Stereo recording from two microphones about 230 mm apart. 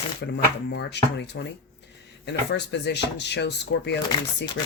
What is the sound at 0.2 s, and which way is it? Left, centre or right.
Speech, left.